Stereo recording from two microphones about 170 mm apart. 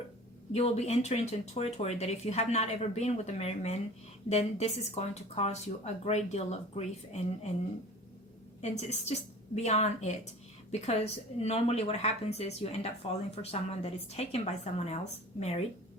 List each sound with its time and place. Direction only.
0.5 s a woman's voice: 40° left (ahead or behind)
8.6 s a woman's voice: 40° left (ahead or behind)